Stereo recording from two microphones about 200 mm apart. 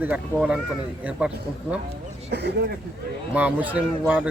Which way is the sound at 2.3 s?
55° right (ahead or behind).